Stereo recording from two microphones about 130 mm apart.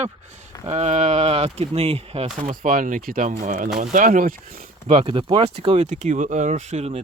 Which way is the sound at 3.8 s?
85° right.